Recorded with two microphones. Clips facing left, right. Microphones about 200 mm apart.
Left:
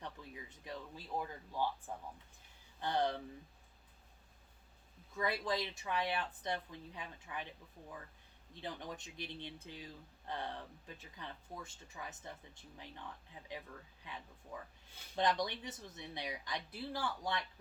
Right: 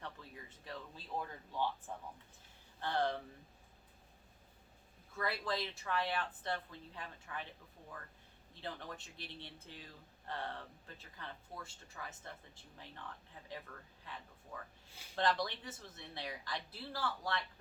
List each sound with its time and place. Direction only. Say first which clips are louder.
0.0 s speech: left 1 dB; 15° left (ahead or behind)
2.8 s speech: left 1 dB; 15° left (ahead or behind)
5.1 s speech: left 2 dB; 15° left (ahead or behind)
8.6 s speech: left 1 dB; 15° left (ahead or behind)
13.5 s speech: left 1 dB; 15° left (ahead or behind)